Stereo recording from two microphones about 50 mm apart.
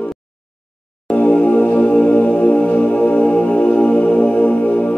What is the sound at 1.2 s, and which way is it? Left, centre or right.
Music, left.